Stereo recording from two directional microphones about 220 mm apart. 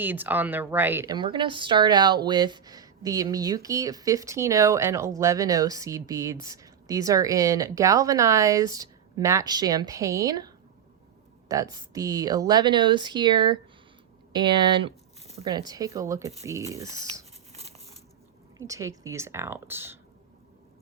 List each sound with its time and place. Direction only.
0.0 s speech: 10° right (ahead or behind)
17.5 s a sound: 30° right (ahead or behind)
18.5 s speech: 15° right (ahead or behind)